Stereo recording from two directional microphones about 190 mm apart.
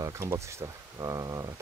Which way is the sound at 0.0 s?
15° right (ahead or behind).